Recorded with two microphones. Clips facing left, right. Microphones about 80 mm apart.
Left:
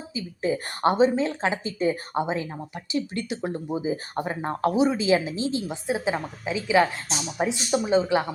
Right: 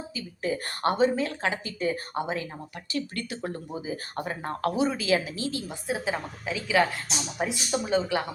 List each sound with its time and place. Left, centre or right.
0.1 s speech: left